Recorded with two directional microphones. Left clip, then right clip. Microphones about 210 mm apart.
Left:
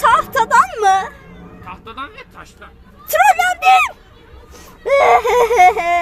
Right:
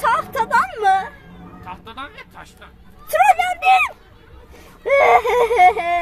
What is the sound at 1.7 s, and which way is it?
Speech, 20° right (ahead or behind).